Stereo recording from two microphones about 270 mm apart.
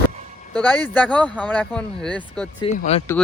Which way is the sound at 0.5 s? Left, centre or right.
Centre.